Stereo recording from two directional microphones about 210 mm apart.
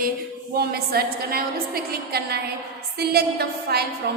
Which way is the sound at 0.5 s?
45° right (ahead or behind).